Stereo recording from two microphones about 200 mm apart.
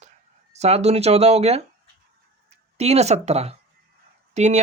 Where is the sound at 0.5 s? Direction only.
35° right (ahead or behind).